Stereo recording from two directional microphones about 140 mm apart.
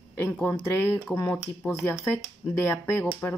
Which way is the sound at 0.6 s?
15° left (ahead or behind).